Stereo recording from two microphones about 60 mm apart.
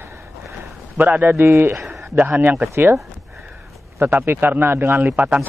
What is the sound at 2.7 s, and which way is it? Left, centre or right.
Speech, right.